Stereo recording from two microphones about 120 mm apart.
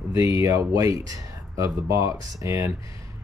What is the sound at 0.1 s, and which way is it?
Speech, 25° right (ahead or behind).